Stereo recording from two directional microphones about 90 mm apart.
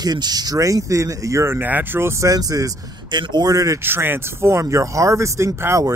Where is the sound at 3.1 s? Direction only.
55° right (ahead or behind); by 3.8 s 40° right (ahead or behind).